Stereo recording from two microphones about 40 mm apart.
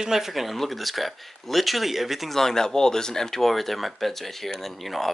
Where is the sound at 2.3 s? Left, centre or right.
Centre.